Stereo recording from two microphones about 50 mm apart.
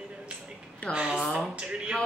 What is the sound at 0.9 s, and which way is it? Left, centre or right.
Speech, right.